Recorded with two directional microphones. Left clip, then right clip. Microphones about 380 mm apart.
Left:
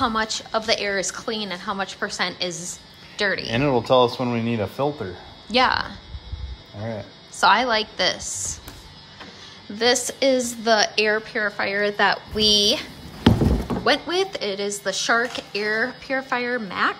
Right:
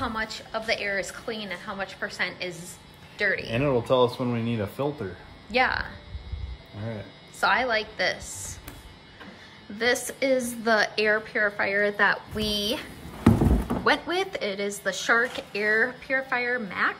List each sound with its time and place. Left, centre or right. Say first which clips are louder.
0.0 s a woman's voice: left 8 dB; centre
3.5 s speech: left 6 dB; left
5.5 s a woman's voice: left 5 dB; centre
7.3 s a woman's voice: left 6 dB; centre
9.8 s a woman's voice: left 5 dB; centre
13.8 s a woman's voice: left 3 dB; centre